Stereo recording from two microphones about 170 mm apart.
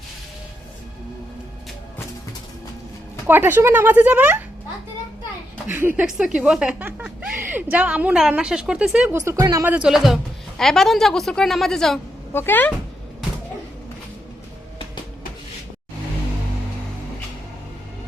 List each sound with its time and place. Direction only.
3.2 s speech: 10° right (ahead or behind)
5.6 s a woman's voice: 10° right (ahead or behind)
9.2 s speech: 20° right (ahead or behind)
9.7 s a woman's voice: 5° right (ahead or behind)
12.3 s speech: 10° left (ahead or behind)